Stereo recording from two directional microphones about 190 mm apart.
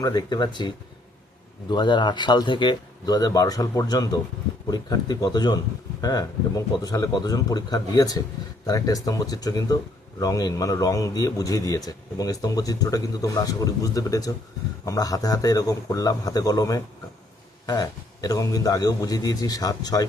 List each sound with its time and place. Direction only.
0.0 s a man's voice: 20° left (ahead or behind)
1.7 s a man's voice: 25° left (ahead or behind)